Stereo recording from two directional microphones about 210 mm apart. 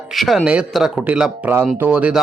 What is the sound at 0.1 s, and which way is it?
Speech, centre (ahead or behind).